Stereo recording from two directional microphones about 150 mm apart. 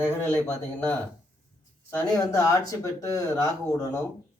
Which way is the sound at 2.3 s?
20° left (ahead or behind).